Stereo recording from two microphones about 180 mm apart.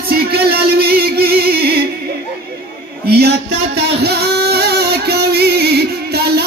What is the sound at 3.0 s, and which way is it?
Music, 60° right (ahead or behind).